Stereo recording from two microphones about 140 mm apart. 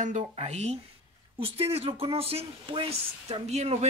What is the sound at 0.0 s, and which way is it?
Speech, 55° right (ahead or behind).